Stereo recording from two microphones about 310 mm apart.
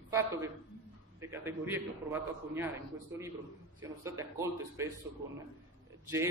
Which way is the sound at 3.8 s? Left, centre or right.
Centre.